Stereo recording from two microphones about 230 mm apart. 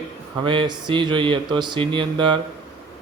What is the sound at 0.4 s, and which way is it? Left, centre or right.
Speech, right.